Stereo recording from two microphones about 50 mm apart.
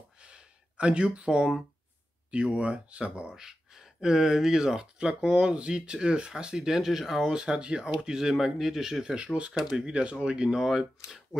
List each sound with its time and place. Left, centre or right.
0.2 s gasp: right
2.3 s speech: right
3.3 s speech: centre
9.0 s speech: centre